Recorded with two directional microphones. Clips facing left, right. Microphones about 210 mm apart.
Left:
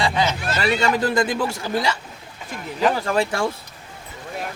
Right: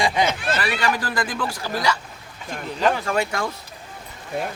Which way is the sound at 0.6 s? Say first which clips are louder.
Left 8 dB; 25° left (ahead or behind).